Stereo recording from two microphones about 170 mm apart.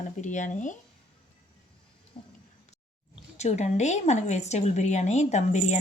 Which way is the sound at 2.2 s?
60° left (ahead or behind).